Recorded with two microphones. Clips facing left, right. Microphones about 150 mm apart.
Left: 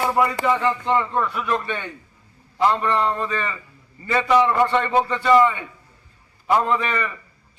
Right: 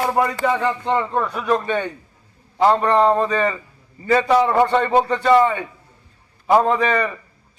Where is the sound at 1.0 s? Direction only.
35° right (ahead or behind).